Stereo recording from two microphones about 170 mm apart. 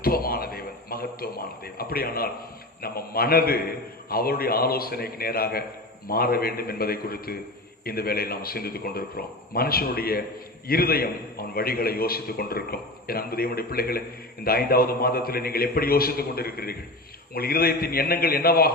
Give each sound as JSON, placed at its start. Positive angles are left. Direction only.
{"t": 0.0, "sound": "a man's voice", "side_deg": 60}